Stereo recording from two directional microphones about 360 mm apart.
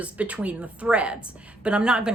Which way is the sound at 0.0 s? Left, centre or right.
Centre.